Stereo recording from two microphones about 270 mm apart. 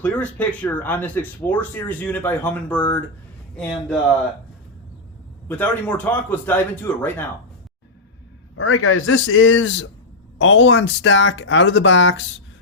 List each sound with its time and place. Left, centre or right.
0.0 s speech: centre
5.5 s a man's voice: centre
8.5 s speech: left